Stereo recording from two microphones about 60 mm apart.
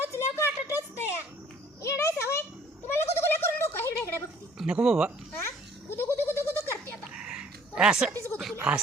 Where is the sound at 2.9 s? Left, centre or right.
Left.